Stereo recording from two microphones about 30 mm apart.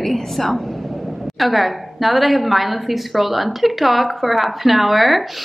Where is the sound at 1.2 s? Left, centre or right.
Centre.